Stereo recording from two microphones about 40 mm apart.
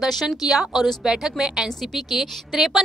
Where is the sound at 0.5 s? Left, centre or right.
Centre.